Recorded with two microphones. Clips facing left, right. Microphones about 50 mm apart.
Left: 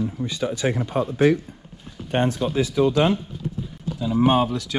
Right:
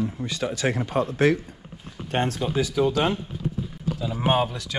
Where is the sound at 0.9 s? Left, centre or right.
Right.